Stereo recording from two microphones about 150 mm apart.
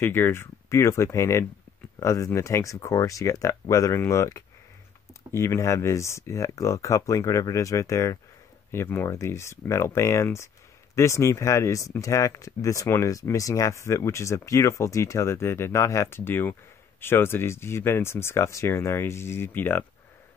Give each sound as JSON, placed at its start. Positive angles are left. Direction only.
{"t": 0.0, "sound": "speech", "side_deg": 15}